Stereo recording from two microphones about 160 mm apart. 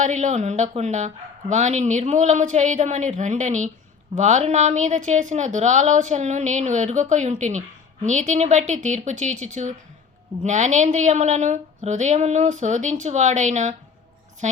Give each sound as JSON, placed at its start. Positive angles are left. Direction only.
{"t": 0.0, "sound": "speech", "side_deg": -50}